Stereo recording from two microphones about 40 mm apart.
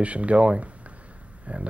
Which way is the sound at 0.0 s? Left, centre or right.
Right.